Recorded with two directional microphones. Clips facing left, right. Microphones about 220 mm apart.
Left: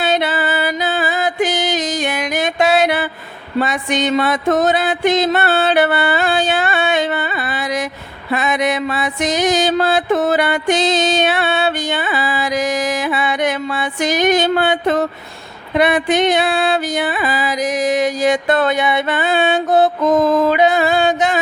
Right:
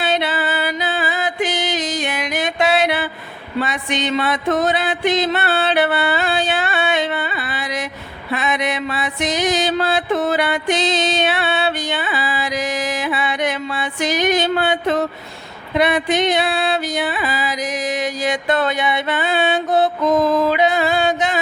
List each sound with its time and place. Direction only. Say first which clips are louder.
0.0 s music: left 3 dB; 45° left (ahead or behind)
8.3 s mantra: left 4 dB; 45° left (ahead or behind)
15.8 s music: left 3 dB; 50° left (ahead or behind)